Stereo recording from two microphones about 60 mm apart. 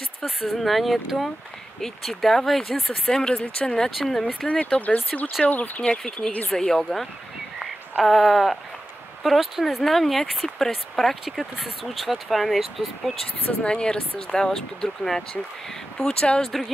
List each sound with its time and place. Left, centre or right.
0.2 s speech: centre
4.5 s speech: left
5.9 s speech: centre
13.5 s speech: centre